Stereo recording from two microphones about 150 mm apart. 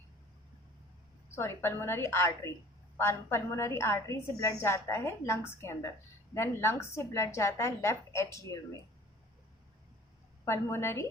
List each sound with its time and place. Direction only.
1.4 s a woman's voice: 15° left (ahead or behind)
10.4 s a woman's voice: 15° left (ahead or behind)